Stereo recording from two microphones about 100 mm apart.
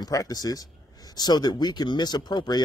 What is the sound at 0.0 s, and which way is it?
Speech, 40° left (ahead or behind).